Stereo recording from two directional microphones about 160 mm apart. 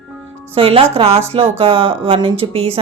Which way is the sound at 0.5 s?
35° right (ahead or behind).